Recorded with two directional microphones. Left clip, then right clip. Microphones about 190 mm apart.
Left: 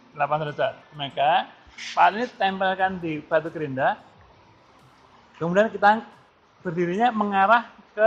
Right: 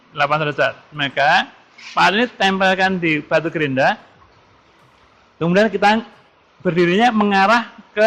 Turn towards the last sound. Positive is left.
turn(degrees=-50)  # may be behind; listen again after turning